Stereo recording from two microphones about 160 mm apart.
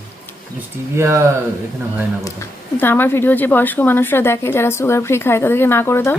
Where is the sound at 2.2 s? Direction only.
15° left (ahead or behind).